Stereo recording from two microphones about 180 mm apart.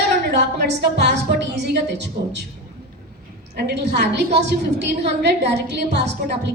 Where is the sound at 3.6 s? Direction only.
65° right (ahead or behind).